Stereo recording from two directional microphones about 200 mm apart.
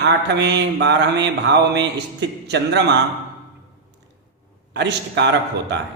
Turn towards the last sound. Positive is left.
turn(degrees=-60)  # may be behind; listen again after turning